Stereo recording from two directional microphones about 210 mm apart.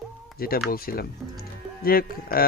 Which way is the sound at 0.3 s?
45° left (ahead or behind).